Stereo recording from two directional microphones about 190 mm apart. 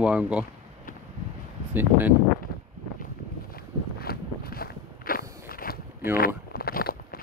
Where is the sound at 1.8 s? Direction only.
10° right (ahead or behind).